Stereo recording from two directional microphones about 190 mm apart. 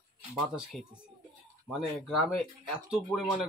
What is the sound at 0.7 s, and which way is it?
Speech, centre (ahead or behind).